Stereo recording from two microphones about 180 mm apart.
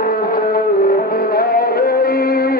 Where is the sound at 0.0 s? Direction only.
55° left (ahead or behind).